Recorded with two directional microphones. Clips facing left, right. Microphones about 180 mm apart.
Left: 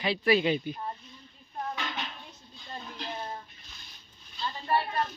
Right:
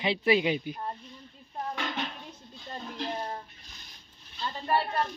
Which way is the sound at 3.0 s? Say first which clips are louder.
Right 5 dB; 35° right (ahead or behind).